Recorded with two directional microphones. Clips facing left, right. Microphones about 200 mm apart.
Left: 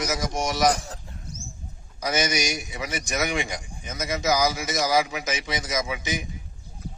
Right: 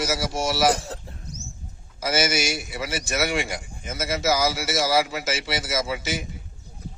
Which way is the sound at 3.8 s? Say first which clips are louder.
Right 1 dB; 5° right (ahead or behind).